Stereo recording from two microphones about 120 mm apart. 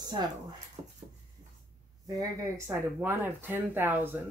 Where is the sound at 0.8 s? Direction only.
55° right (ahead or behind).